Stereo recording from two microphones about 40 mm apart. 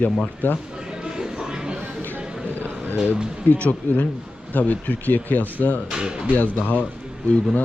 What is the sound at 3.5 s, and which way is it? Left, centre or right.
Speech, left.